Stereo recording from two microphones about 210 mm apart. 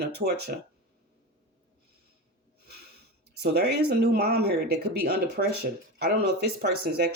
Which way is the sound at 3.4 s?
50° right (ahead or behind).